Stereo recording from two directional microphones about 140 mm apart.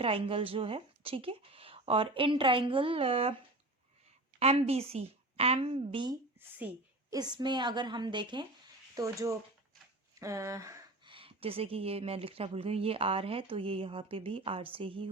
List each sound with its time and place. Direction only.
0.0 s speech: 40° right (ahead or behind)
4.4 s a woman's voice: 45° right (ahead or behind); by 10.8 s 20° right (ahead or behind)
11.0 s speech: 40° right (ahead or behind)